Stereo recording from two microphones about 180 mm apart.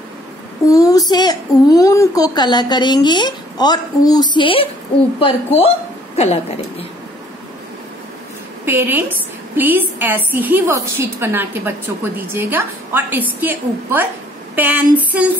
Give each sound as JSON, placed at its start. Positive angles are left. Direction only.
{"t": 0.7, "sound": "a child's voice", "side_deg": 20}
{"t": 8.6, "sound": "a woman's voice", "side_deg": -10}